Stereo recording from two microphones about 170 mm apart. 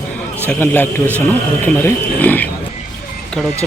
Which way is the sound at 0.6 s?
10° left (ahead or behind).